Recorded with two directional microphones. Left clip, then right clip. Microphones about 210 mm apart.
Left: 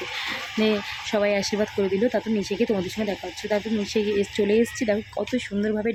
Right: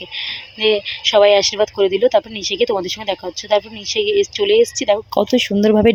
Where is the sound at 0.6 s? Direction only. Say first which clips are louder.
Right 9 dB; 30° right (ahead or behind).